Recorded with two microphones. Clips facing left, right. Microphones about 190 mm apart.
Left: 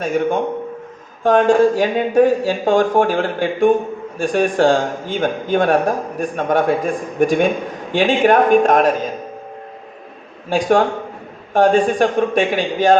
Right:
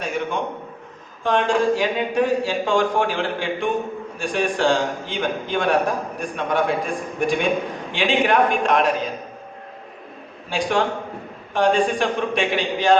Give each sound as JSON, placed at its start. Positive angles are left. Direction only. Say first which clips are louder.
{"t": 0.0, "sound": "a man's voice", "louder": "left 7 dB", "side_deg": 45}
{"t": 10.5, "sound": "a man's voice", "louder": "left 6 dB", "side_deg": 45}